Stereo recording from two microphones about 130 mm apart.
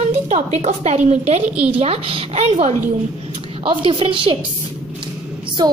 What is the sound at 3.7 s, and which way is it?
Speech, 40° right (ahead or behind).